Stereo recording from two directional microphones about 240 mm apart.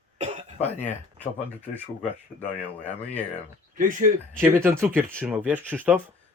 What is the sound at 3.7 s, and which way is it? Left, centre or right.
Speech, right.